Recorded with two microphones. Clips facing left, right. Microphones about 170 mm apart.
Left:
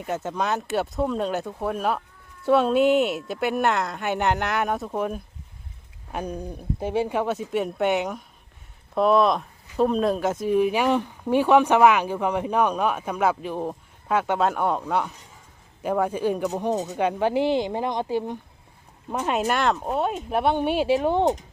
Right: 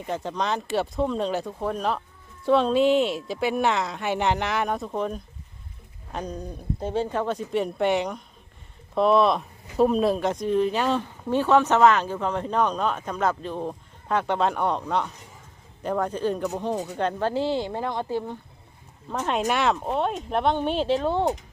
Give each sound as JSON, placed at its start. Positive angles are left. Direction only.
{"t": 0.0, "sound": "speech", "side_deg": 5}